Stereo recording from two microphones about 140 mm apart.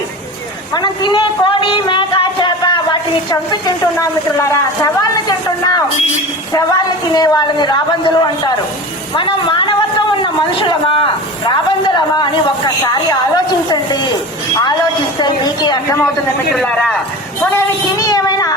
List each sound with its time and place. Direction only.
0.7 s a sound: 30° left (ahead or behind)
4.0 s a woman's voice: 20° left (ahead or behind)
7.1 s a woman's voice: 30° left (ahead or behind)
15.2 s a woman's voice: 30° left (ahead or behind)
16.5 s a man's voice: 5° left (ahead or behind)
17.5 s a sound: 25° left (ahead or behind)